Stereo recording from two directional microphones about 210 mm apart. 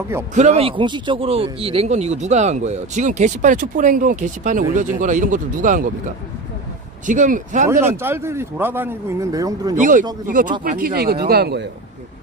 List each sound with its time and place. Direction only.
0.3 s speech: 35° right (ahead or behind)
7.1 s speech: 40° right (ahead or behind)
7.8 s a man's voice: 10° right (ahead or behind)
9.8 s speech: 40° right (ahead or behind)